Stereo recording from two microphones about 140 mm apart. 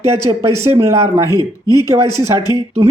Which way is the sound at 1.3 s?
25° left (ahead or behind).